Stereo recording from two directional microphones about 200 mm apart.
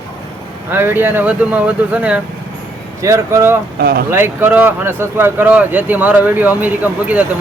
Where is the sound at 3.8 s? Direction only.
50° right (ahead or behind).